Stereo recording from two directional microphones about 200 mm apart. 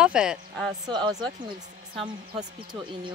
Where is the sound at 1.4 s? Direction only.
25° right (ahead or behind).